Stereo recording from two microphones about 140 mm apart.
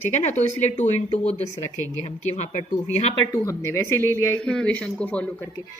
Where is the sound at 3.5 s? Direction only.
20° left (ahead or behind).